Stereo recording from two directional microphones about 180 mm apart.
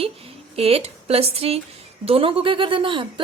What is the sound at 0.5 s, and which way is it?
A woman's voice, 35° right (ahead or behind).